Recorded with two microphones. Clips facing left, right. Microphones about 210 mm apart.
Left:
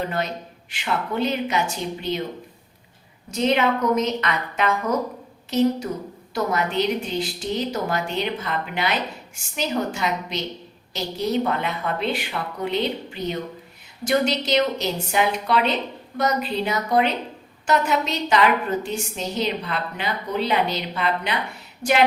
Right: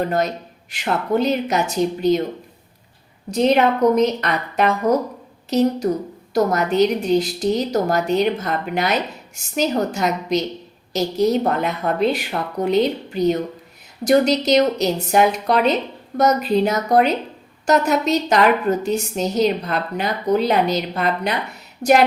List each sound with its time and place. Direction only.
0.7 s a woman's voice: 40° right (ahead or behind)
3.3 s a woman's voice: 35° right (ahead or behind)